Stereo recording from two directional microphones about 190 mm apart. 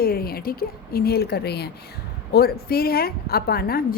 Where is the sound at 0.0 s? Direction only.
55° left (ahead or behind).